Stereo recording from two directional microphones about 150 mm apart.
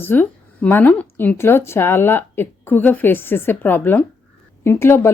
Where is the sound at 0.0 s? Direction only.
15° left (ahead or behind).